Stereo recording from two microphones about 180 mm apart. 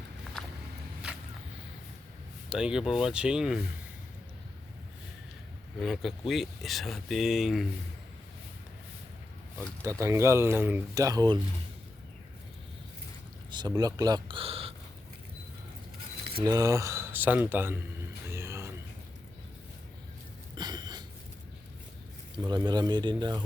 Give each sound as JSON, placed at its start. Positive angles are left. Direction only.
{"t": 2.5, "sound": "speech", "side_deg": -5}
{"t": 5.8, "sound": "speech", "side_deg": 0}
{"t": 9.8, "sound": "speech", "side_deg": -15}
{"t": 13.5, "sound": "speech", "side_deg": -25}
{"t": 16.3, "sound": "speech", "side_deg": -20}
{"t": 18.3, "sound": "a sound", "side_deg": -15}
{"t": 20.6, "sound": "a sound", "side_deg": -25}
{"t": 22.4, "sound": "speech", "side_deg": -20}